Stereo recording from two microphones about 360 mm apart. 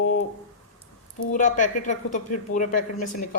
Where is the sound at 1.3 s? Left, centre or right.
Left.